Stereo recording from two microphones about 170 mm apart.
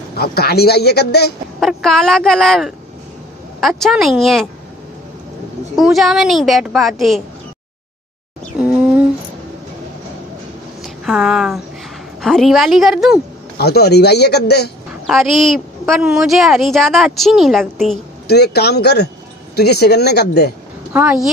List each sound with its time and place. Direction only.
0.1 s a man's voice: 65° left (ahead or behind)
1.6 s a woman's voice: centre (ahead or behind)
5.8 s a woman's voice: centre (ahead or behind)
10.8 s a sound: centre (ahead or behind)
12.2 s a woman's voice: centre (ahead or behind)
13.6 s a man's voice: 70° left (ahead or behind)
15.0 s a woman's voice: centre (ahead or behind)
18.2 s a man's voice: 70° left (ahead or behind)
20.9 s speech: 10° right (ahead or behind)